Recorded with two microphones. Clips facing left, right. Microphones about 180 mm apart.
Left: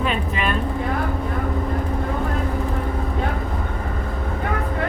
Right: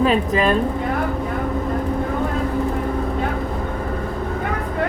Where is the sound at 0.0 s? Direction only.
35° right (ahead or behind).